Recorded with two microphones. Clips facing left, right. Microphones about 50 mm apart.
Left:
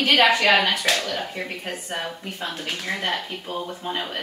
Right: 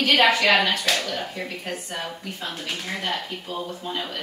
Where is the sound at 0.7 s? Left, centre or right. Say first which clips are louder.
Left 1 dB; left.